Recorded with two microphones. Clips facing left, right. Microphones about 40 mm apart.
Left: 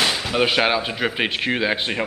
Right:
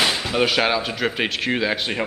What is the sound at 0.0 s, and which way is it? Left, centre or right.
Slam, centre.